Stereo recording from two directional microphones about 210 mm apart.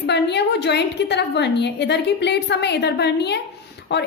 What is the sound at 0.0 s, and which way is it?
A woman's voice, 55° left (ahead or behind).